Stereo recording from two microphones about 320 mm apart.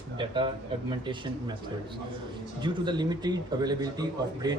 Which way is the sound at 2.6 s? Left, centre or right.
Centre.